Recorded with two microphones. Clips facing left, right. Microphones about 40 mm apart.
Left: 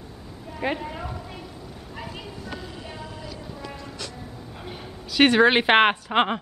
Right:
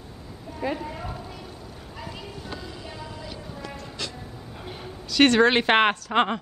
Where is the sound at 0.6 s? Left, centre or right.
Left.